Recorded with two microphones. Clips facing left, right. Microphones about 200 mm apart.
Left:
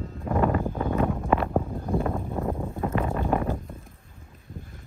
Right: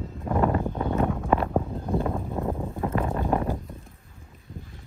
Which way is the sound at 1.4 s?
Centre (ahead or behind).